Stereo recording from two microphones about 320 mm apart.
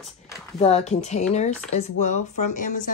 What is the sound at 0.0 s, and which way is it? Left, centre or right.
Speech, centre.